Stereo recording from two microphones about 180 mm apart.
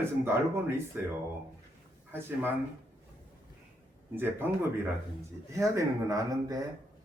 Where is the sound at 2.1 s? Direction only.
10° right (ahead or behind).